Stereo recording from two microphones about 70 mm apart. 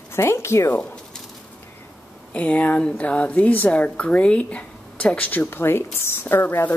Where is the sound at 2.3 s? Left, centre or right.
Left.